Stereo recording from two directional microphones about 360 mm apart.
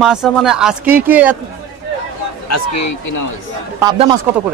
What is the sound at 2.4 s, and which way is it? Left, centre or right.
Speech, left.